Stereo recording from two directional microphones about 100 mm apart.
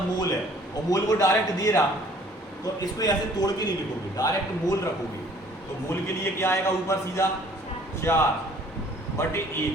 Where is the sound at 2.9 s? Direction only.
40° left (ahead or behind).